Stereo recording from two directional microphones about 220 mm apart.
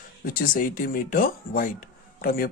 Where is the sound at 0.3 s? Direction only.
40° left (ahead or behind).